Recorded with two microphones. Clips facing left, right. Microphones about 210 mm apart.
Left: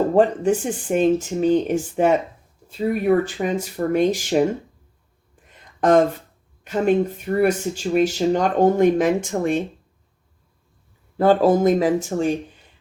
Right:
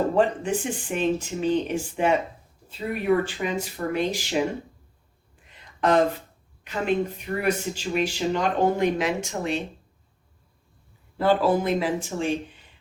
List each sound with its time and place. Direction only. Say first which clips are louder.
0.1 s speech: left 6 dB; 45° left (ahead or behind)
5.5 s a sound: left 5 dB; 45° left (ahead or behind)
6.7 s speech: left 6 dB; 45° left (ahead or behind)
11.2 s speech: left 6 dB; 45° left (ahead or behind)